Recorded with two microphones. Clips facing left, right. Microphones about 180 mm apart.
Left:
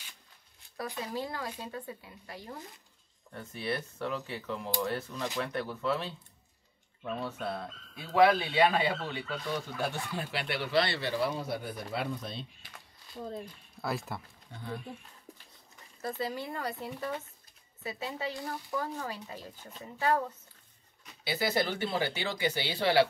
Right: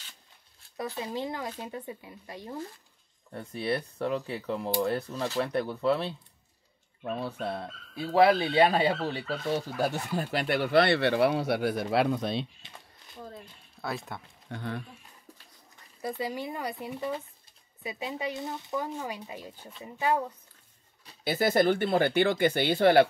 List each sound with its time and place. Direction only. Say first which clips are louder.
0.9 s speech: right 2 dB; 20° right (ahead or behind)
3.3 s speech: right 5 dB; 35° right (ahead or behind); by 12.4 s 75° right (ahead or behind)
13.7 s speech: even; centre (ahead or behind)
14.5 s speech: right 5 dB; 75° right (ahead or behind)
16.0 s speech: right 2 dB; 10° right (ahead or behind)
21.2 s speech: right 6 dB; 50° right (ahead or behind)